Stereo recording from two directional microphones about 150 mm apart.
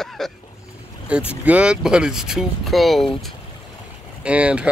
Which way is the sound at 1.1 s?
10° right (ahead or behind).